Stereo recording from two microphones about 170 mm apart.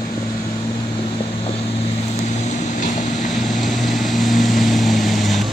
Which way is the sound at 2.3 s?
45° left (ahead or behind).